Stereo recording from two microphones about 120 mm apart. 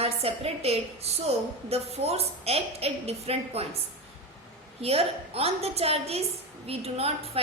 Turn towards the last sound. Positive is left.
turn(degrees=-55)  # may be behind; listen again after turning